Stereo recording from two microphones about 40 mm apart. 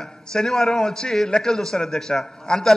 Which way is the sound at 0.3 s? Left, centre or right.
Centre.